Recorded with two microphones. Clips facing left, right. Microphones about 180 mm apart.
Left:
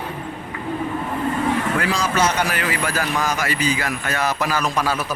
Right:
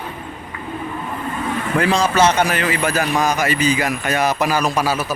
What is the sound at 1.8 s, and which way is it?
Speech, 25° right (ahead or behind).